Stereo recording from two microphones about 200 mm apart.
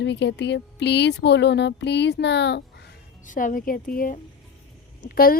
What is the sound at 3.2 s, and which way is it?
Speech, 40° left (ahead or behind).